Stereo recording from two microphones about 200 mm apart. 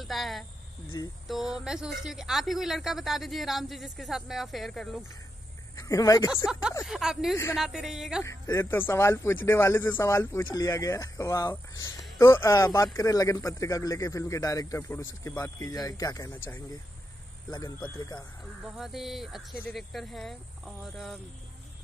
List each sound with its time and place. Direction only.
0.0 s a woman's voice: centre (ahead or behind)
5.8 s speech: 15° left (ahead or behind)
6.4 s a woman's voice: 5° right (ahead or behind)
8.2 s speech: 15° left (ahead or behind)
17.5 s speech: 20° left (ahead or behind)
18.6 s a woman's voice: centre (ahead or behind)